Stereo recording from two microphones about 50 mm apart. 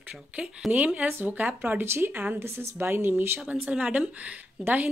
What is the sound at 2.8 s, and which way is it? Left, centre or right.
Speech, right.